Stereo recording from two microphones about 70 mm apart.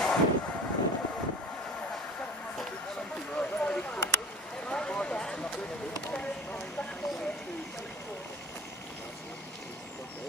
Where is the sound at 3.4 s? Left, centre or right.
Centre.